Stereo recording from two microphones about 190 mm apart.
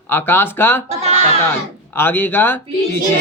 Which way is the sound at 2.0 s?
10° left (ahead or behind).